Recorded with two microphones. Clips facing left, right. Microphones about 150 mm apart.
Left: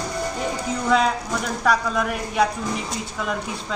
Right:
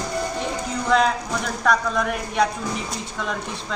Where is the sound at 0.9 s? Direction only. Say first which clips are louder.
Right 1 dB; 5° left (ahead or behind).